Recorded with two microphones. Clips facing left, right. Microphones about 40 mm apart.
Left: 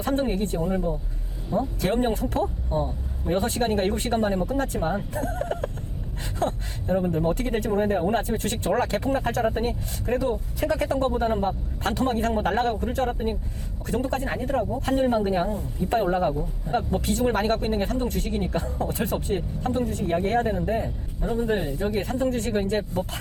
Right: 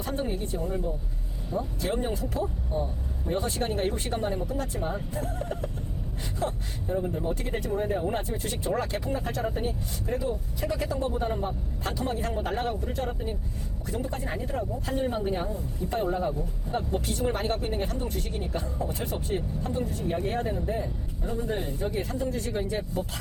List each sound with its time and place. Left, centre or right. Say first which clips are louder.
0.0 s speech: left 6 dB; left
8.1 s speech: left 6 dB; left
11.1 s speech: left 6 dB; left
20.7 s speech: left 4 dB; left